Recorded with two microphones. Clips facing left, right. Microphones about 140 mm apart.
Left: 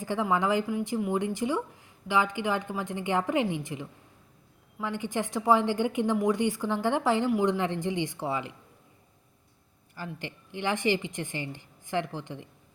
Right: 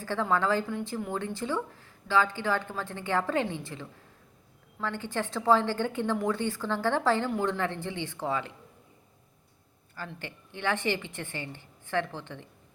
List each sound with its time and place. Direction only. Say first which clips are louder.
0.0 s speech: left 1 dB; 15° left (ahead or behind)
9.9 s speech: left 2 dB; 15° left (ahead or behind)